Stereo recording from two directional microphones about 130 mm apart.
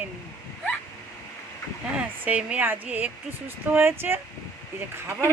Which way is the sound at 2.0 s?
10° right (ahead or behind).